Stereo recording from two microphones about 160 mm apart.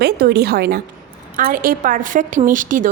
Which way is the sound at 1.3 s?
60° right (ahead or behind).